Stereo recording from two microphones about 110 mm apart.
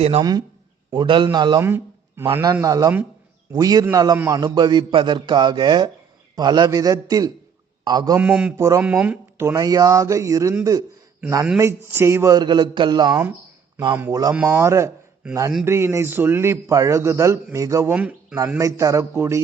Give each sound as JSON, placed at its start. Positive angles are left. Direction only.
{"t": 0.2, "sound": "a man's voice", "side_deg": -35}
{"t": 1.6, "sound": "a man's voice", "side_deg": -20}
{"t": 6.7, "sound": "a man's voice", "side_deg": -30}
{"t": 8.2, "sound": "mantra", "side_deg": -10}
{"t": 8.5, "sound": "a man's voice", "side_deg": -25}
{"t": 8.8, "sound": "speech", "side_deg": -10}
{"t": 9.5, "sound": "a man's voice", "side_deg": -35}
{"t": 12.4, "sound": "a man's voice", "side_deg": -40}
{"t": 17.9, "sound": "speech", "side_deg": -10}
{"t": 18.6, "sound": "a man's voice", "side_deg": -30}